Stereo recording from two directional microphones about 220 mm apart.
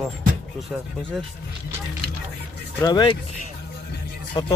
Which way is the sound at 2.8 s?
20° left (ahead or behind).